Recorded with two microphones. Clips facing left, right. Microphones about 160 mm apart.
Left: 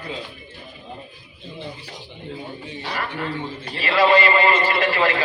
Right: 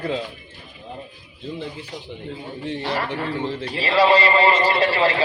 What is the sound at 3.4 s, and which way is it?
Speech, 90° right.